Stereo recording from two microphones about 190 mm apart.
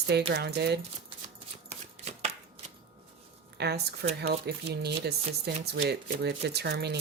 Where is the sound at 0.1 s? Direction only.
60° right (ahead or behind).